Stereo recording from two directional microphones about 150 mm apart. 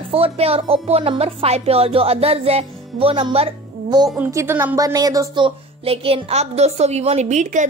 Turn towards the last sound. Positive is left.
turn(degrees=-50)  # may be behind; listen again after turning